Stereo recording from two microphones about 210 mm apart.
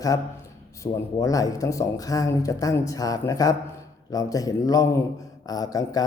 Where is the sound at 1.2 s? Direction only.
15° left (ahead or behind).